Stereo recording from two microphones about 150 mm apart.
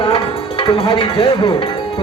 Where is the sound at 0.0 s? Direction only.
35° left (ahead or behind).